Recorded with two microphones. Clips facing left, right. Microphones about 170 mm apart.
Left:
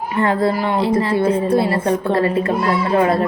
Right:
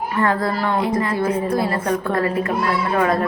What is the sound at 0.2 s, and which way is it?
A woman's voice, 25° left (ahead or behind).